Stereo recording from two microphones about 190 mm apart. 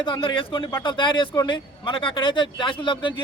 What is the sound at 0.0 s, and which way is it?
A man's voice, 25° left (ahead or behind).